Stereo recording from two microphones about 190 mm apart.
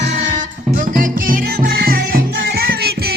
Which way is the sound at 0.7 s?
45° right (ahead or behind).